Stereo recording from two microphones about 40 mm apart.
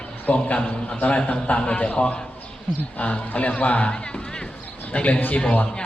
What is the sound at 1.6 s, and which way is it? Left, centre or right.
Speech, left.